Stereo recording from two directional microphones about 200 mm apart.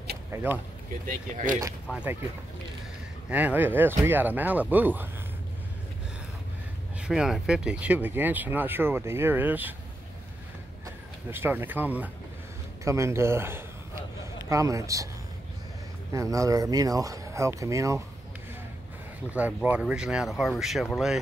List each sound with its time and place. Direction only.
0.3 s speech: 10° right (ahead or behind)
1.0 s speech: 40° right (ahead or behind)
1.9 s speech: 5° right (ahead or behind)
3.3 s speech: 10° right (ahead or behind)
7.0 s speech: 5° right (ahead or behind)
11.2 s speech: 10° right (ahead or behind)
16.1 s speech: 15° right (ahead or behind)
19.3 s speech: 5° right (ahead or behind)